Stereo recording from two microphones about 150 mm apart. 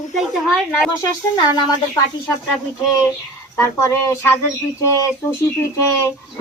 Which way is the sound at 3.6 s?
20° left (ahead or behind).